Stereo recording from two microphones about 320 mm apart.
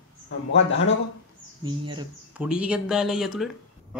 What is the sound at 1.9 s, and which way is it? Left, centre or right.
Speech, centre.